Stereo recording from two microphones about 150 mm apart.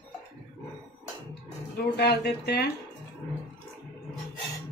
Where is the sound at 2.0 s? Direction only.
90° left.